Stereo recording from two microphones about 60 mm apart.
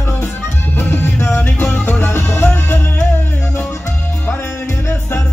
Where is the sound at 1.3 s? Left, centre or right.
Left.